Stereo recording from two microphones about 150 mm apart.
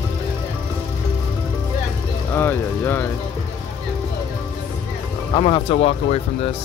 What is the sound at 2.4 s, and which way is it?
Vehicle, 15° left (ahead or behind).